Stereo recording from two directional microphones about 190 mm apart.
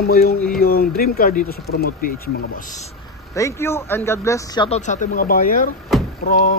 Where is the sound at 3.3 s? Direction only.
15° left (ahead or behind).